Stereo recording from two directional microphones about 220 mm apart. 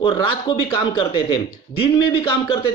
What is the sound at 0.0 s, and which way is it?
Speech, 25° left (ahead or behind).